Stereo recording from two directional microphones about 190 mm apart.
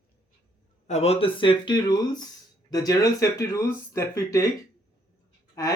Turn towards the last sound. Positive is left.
turn(degrees=20)  # may be behind; listen again after turning